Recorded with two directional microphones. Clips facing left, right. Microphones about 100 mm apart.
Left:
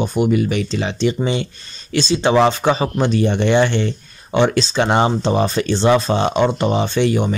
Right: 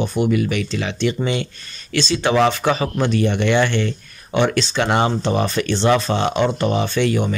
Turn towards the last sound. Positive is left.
turn(degrees=20)  # may be behind; listen again after turning